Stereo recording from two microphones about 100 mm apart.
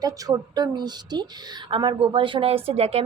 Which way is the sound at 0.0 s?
40° right (ahead or behind).